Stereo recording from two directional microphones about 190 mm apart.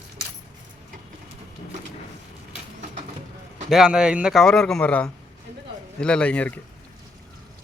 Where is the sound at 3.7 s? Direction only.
5° right (ahead or behind).